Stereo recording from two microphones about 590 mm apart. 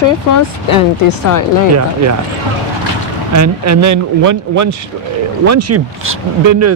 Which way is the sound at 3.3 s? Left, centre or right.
Right.